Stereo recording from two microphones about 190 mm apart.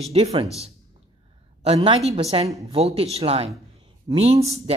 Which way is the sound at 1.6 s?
30° right (ahead or behind).